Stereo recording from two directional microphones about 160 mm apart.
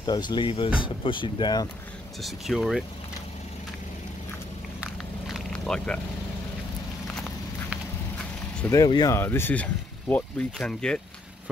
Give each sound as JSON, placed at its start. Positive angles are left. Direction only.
{"t": 0.0, "sound": "speech", "side_deg": 25}
{"t": 2.2, "sound": "speech", "side_deg": 0}
{"t": 4.7, "sound": "a sound", "side_deg": -5}
{"t": 7.2, "sound": "walk", "side_deg": 0}
{"t": 8.5, "sound": "speech", "side_deg": 15}